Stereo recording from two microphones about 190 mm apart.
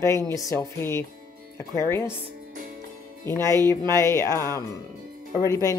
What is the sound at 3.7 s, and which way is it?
Speech, 15° left (ahead or behind).